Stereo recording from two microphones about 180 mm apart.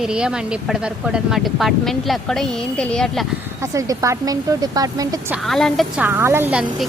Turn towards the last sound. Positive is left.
turn(degrees=-10)  # may be behind; listen again after turning